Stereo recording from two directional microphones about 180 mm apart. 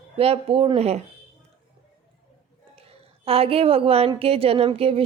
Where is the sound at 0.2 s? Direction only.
30° right (ahead or behind).